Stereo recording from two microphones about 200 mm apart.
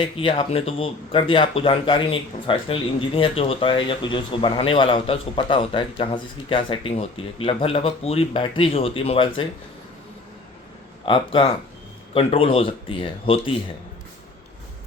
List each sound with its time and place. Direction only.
0.0 s speech: 25° left (ahead or behind)
11.0 s speech: 25° left (ahead or behind)